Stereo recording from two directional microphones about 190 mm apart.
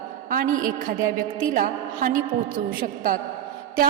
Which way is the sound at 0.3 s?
45° right (ahead or behind).